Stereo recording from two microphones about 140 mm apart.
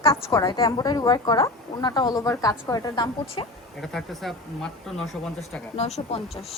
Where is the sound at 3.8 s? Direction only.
Centre (ahead or behind).